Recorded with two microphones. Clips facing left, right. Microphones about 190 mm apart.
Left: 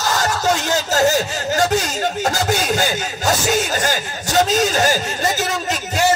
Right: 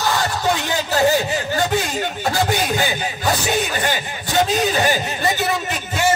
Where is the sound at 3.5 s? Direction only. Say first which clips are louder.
Left 1 dB; 40° left (ahead or behind).